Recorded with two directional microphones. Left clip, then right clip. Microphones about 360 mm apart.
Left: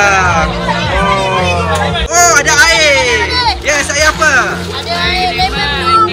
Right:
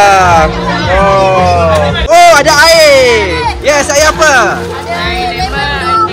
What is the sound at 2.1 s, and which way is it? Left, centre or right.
Speech, centre.